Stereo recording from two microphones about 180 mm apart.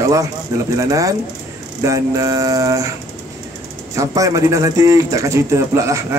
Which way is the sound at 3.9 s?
20° right (ahead or behind).